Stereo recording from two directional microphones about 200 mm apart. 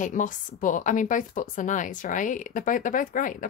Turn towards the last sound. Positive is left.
turn(degrees=40)  # may be behind; listen again after turning